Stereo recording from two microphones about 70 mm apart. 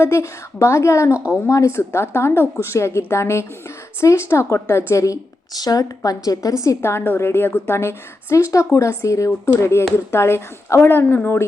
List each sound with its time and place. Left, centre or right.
0.0 s a woman's voice: left
4.9 s a woman's voice: left